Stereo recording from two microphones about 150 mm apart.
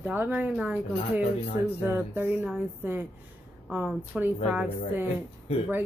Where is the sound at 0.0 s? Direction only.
10° right (ahead or behind).